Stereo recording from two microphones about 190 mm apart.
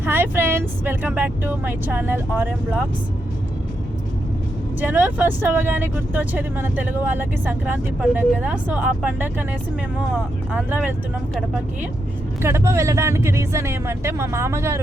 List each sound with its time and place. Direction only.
0.0 s speech: 10° right (ahead or behind)
4.8 s speech: 10° right (ahead or behind)
10.5 s speech: 10° right (ahead or behind)
12.4 s speech: 15° right (ahead or behind)